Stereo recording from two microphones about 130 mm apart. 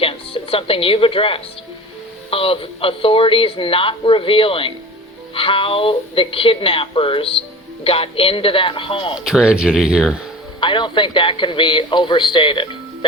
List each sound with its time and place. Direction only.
0.0 s speech: 45° left (ahead or behind)
9.1 s speech: 5° right (ahead or behind)
10.6 s speech: 40° left (ahead or behind)